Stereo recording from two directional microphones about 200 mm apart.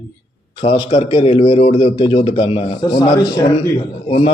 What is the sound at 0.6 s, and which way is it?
A man's voice, 30° left (ahead or behind).